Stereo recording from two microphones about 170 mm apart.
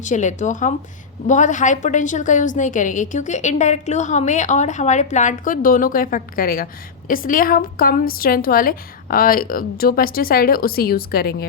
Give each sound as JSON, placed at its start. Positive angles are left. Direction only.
{"t": 0.0, "sound": "a woman's voice", "side_deg": 45}